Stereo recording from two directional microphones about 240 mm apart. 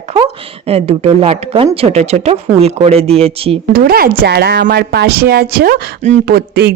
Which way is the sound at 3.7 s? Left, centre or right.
Right.